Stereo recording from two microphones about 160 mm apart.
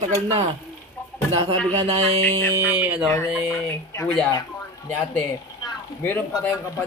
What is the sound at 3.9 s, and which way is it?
Speech, 20° left (ahead or behind).